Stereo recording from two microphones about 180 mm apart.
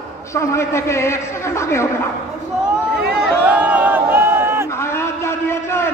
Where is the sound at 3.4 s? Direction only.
10° right (ahead or behind).